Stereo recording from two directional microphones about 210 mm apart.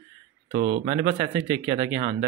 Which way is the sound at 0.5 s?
40° right (ahead or behind).